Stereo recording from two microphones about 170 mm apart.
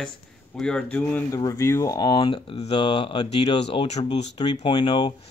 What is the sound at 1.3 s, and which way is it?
Speech, 20° left (ahead or behind).